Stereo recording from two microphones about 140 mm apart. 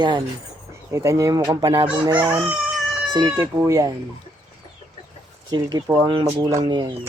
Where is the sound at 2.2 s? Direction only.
15° right (ahead or behind).